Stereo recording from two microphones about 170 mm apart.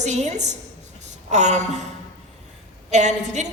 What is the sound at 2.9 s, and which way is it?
Speech, 45° right (ahead or behind).